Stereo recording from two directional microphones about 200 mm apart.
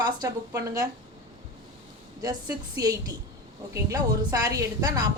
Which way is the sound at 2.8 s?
20° right (ahead or behind).